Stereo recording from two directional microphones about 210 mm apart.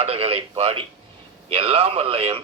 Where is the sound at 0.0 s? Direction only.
30° right (ahead or behind).